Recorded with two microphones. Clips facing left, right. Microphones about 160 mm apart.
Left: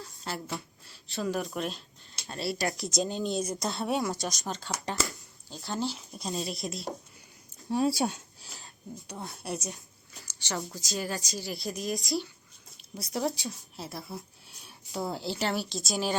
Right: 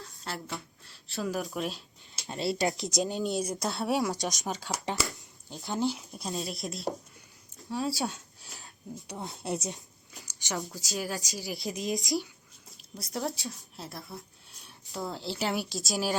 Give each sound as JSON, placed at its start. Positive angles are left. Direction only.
{"t": 0.0, "sound": "speech", "side_deg": 0}
{"t": 2.2, "sound": "speech", "side_deg": -20}
{"t": 6.1, "sound": "speech", "side_deg": 0}
{"t": 7.7, "sound": "speech", "side_deg": 20}
{"t": 8.4, "sound": "a sound", "side_deg": 0}
{"t": 9.0, "sound": "speech", "side_deg": -20}
{"t": 10.5, "sound": "speech", "side_deg": 0}
{"t": 11.3, "sound": "speech", "side_deg": -15}
{"t": 12.7, "sound": "speech", "side_deg": 0}